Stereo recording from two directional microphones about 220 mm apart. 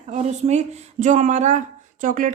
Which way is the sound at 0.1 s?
30° right (ahead or behind).